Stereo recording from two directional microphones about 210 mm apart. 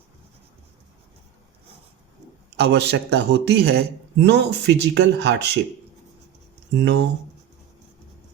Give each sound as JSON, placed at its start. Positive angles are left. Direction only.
{"t": 2.5, "sound": "speech", "side_deg": -55}
{"t": 6.7, "sound": "speech", "side_deg": -60}